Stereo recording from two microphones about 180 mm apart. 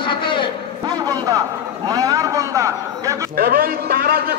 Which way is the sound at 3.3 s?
60° right (ahead or behind).